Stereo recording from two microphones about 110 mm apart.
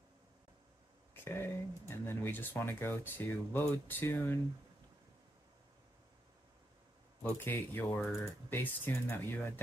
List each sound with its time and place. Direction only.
1.1 s speech: 20° left (ahead or behind)
7.3 s speech: 20° left (ahead or behind)